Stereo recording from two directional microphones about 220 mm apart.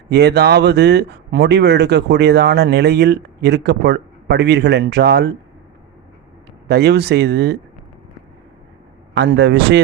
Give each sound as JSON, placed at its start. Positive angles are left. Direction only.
{"t": 0.1, "sound": "speech", "side_deg": -50}
{"t": 6.7, "sound": "speech", "side_deg": -50}
{"t": 9.1, "sound": "speech", "side_deg": -55}